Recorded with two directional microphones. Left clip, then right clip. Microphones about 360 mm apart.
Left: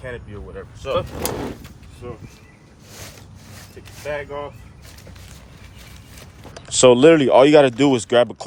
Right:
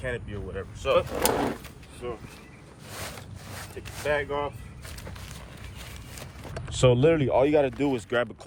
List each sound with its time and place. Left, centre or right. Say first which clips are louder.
0.0 s speech: even; centre
2.9 s vehicle: right 1 dB; centre
6.7 s speech: left 10 dB; centre